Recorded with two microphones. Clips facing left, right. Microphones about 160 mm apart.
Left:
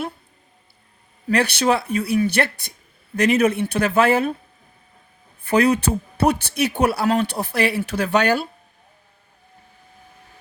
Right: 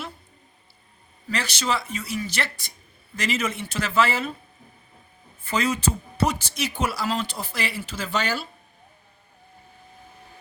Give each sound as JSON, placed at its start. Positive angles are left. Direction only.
{"t": 1.3, "sound": "speech", "side_deg": 60}
{"t": 5.4, "sound": "speech", "side_deg": 60}